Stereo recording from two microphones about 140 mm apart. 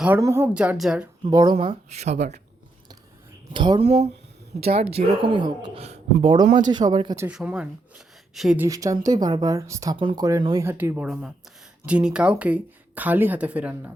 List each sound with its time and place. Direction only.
0.2 s speech: 20° right (ahead or behind)
1.2 s speech: 30° right (ahead or behind)
1.5 s speech: 45° right (ahead or behind)
3.5 s speech: 35° right (ahead or behind)
3.8 s speech: 50° right (ahead or behind); by 7.2 s 30° right (ahead or behind)
7.3 s speech: 5° right (ahead or behind)
8.5 s speech: 20° right (ahead or behind)
10.0 s speech: 35° right (ahead or behind)
10.2 s speech: 25° right (ahead or behind)